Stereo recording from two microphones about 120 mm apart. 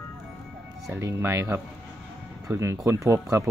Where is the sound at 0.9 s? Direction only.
25° right (ahead or behind).